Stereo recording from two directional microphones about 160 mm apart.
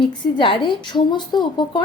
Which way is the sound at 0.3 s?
30° left (ahead or behind).